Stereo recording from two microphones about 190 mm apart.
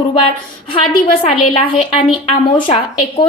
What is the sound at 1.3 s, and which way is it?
A woman's voice, 30° left (ahead or behind).